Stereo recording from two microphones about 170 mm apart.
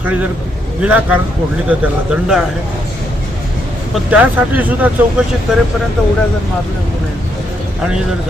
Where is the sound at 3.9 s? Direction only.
10° right (ahead or behind).